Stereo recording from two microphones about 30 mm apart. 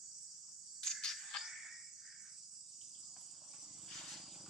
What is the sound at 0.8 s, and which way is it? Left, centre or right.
Cricket, centre.